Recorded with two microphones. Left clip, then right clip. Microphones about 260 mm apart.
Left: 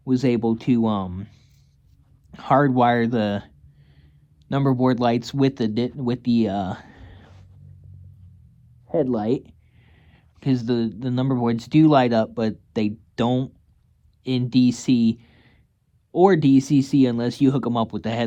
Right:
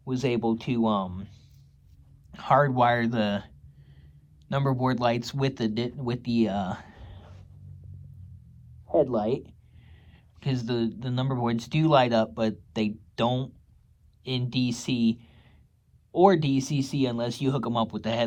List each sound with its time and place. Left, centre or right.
0.1 s speech: left
8.9 s speech: left